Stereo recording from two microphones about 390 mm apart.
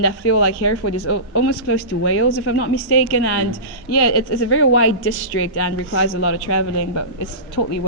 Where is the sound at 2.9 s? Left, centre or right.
Left.